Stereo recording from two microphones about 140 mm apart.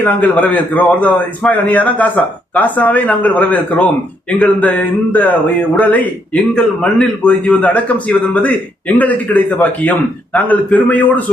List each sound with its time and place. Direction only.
0.0 s a man's voice: 10° left (ahead or behind)